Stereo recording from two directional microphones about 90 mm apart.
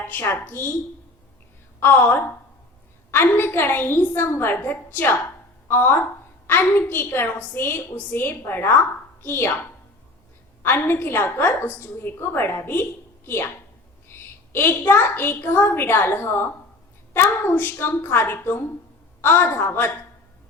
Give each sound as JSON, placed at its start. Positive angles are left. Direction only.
{"t": 0.1, "sound": "a woman's voice", "side_deg": 20}
{"t": 1.8, "sound": "a woman's voice", "side_deg": 25}
{"t": 10.6, "sound": "a woman's voice", "side_deg": 25}